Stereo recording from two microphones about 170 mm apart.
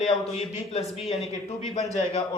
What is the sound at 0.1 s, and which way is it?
A man's voice, 35° left (ahead or behind).